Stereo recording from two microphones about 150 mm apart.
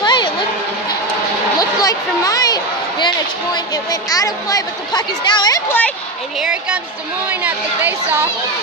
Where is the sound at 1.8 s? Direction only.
25° left (ahead or behind).